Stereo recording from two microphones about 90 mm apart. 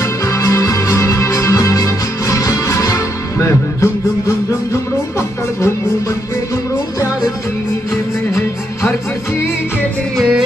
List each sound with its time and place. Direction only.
0.0 s music: 35° left (ahead or behind)
10.1 s music: centre (ahead or behind)